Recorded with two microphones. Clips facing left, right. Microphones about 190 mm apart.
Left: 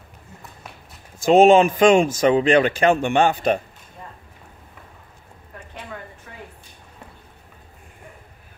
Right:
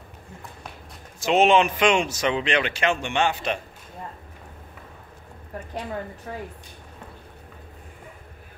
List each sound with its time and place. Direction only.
1.3 s speech: 45° left (ahead or behind)
6.3 s speech: 35° right (ahead or behind)